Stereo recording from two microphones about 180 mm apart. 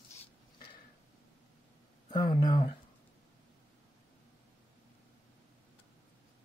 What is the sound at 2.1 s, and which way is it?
Speech, 25° left (ahead or behind).